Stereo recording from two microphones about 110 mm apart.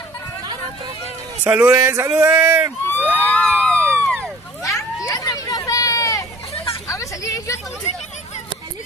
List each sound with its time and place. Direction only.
1.4 s speech: 15° right (ahead or behind)
2.9 s a sound: 15° left (ahead or behind)
4.6 s vehicle: 30° left (ahead or behind)
6.9 s hubbub: 30° left (ahead or behind)